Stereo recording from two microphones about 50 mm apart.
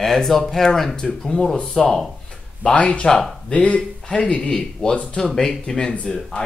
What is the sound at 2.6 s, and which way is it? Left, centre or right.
Speech, left.